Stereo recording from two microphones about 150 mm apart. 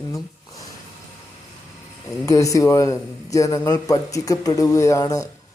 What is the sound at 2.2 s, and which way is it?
Speech, 20° left (ahead or behind).